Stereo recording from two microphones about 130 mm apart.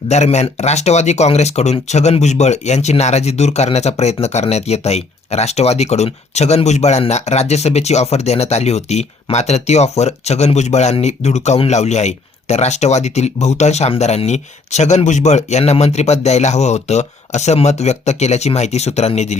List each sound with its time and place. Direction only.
0.1 s speech: 60° left (ahead or behind)